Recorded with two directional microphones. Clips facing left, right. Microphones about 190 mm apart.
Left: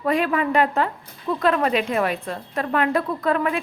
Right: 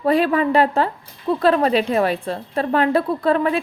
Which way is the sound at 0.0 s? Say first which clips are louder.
Right 4 dB; 30° right (ahead or behind).